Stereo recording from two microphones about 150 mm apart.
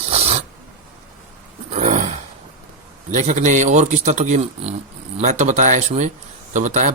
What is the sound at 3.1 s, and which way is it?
Speech, 50° right (ahead or behind).